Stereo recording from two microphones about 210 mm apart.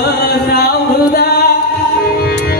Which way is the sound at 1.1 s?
50° left (ahead or behind).